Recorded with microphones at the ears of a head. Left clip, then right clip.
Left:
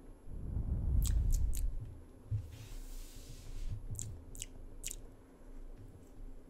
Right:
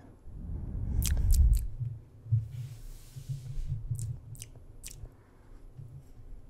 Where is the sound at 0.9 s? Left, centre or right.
Right.